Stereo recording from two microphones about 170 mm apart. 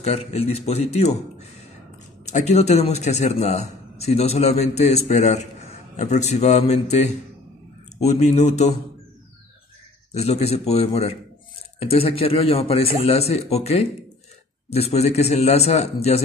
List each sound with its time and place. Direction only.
0.0 s a man's voice: 40° left (ahead or behind)
2.2 s a man's voice: 45° left (ahead or behind)
10.1 s a man's voice: 40° left (ahead or behind)